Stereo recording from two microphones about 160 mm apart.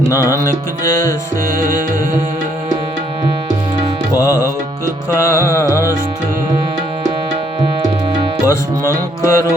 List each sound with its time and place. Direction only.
0.1 s music: 20° left (ahead or behind)
4.1 s music: 20° left (ahead or behind)
8.4 s music: 20° left (ahead or behind)